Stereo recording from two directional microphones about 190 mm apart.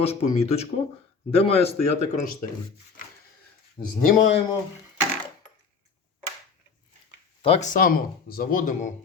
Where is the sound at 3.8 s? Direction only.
25° left (ahead or behind).